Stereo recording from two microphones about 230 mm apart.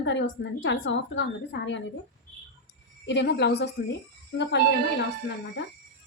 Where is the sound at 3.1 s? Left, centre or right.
Left.